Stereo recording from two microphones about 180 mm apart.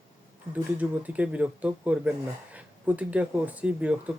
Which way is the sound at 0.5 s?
10° right (ahead or behind).